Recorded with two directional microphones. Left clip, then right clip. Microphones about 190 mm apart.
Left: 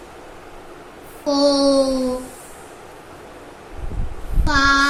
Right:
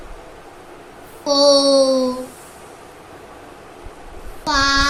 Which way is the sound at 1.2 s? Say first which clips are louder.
Right 3 dB; 55° right (ahead or behind).